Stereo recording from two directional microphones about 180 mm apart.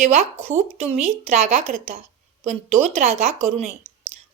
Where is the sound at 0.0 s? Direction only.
35° right (ahead or behind).